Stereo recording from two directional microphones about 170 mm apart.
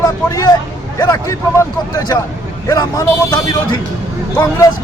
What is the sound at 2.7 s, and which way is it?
Speech, 20° left (ahead or behind).